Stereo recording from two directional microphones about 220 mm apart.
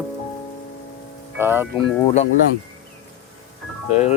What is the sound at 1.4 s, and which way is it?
Speech, 10° right (ahead or behind).